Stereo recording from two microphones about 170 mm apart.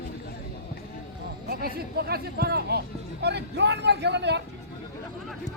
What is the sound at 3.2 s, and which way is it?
A man's voice, 80° right.